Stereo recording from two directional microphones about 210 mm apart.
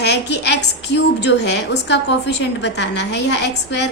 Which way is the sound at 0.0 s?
55° left (ahead or behind).